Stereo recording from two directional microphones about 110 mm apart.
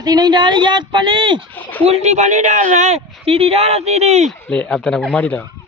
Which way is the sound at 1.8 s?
75° right (ahead or behind).